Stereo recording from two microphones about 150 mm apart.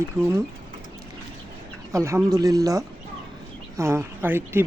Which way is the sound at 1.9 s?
20° right (ahead or behind).